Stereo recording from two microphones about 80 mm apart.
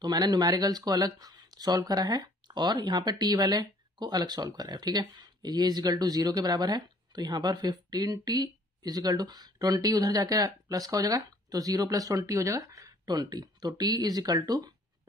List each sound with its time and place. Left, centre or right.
0.0 s speech: right
3.1 s speech: right